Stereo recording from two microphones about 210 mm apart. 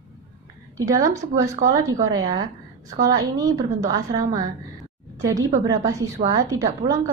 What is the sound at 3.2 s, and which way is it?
A woman's voice, 15° right (ahead or behind).